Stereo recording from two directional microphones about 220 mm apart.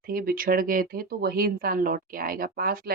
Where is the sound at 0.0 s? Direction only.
40° right (ahead or behind).